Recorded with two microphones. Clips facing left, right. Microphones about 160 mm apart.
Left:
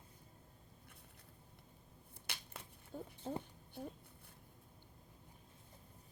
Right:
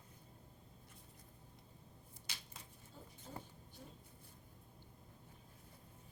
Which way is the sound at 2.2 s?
60° left (ahead or behind).